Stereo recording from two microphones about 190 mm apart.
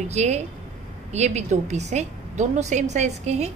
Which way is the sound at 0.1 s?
35° right (ahead or behind).